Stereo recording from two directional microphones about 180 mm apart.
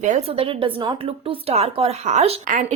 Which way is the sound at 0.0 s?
35° right (ahead or behind).